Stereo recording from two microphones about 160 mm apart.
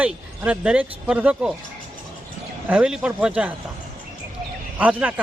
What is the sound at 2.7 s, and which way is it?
Speech, 5° right (ahead or behind).